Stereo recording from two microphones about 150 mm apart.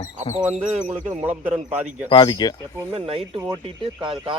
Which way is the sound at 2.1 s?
30° left (ahead or behind).